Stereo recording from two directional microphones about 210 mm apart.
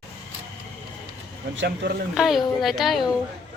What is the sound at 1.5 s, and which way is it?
Speech, 55° right (ahead or behind).